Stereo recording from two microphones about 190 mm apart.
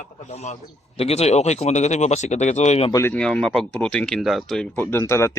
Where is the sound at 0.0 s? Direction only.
35° left (ahead or behind).